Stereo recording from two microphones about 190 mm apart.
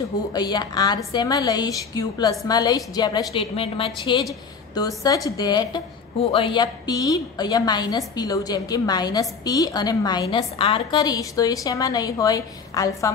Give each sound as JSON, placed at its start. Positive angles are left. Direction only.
{"t": 0.3, "sound": "a woman's voice", "side_deg": 20}